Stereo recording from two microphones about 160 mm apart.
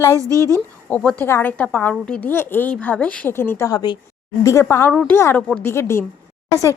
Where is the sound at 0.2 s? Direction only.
20° right (ahead or behind).